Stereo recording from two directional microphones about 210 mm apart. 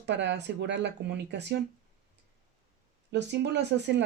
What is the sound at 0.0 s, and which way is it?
Speech, 55° right (ahead or behind).